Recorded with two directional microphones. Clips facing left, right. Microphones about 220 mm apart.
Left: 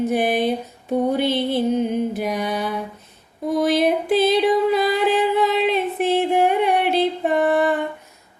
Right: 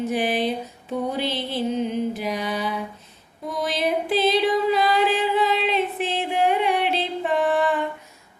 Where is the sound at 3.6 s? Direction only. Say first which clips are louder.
Left 5 dB; 55° left (ahead or behind).